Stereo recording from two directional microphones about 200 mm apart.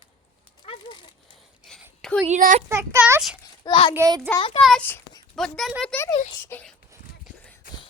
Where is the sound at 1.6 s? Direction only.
Centre (ahead or behind).